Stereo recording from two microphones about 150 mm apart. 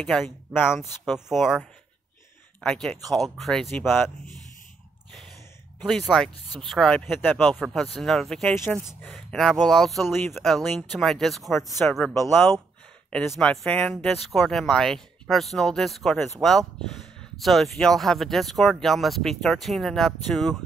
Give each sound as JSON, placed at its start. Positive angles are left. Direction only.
{"t": 0.0, "sound": "speech", "side_deg": 0}
{"t": 2.6, "sound": "speech", "side_deg": 5}
{"t": 3.7, "sound": "speech", "side_deg": 15}
{"t": 5.9, "sound": "speech", "side_deg": 0}
{"t": 10.1, "sound": "speech", "side_deg": 15}
{"t": 10.4, "sound": "speech", "side_deg": 0}